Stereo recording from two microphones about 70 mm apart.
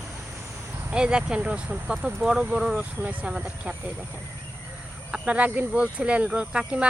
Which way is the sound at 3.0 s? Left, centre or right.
Right.